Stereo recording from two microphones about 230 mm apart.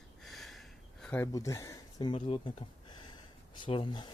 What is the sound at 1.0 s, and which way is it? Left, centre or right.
Speech, centre.